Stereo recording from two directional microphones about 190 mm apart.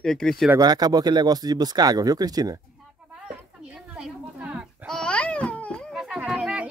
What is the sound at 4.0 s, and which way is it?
Babbling, 5° right (ahead or behind).